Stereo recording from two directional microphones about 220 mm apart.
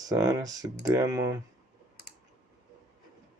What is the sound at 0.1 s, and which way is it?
Speech, 15° right (ahead or behind).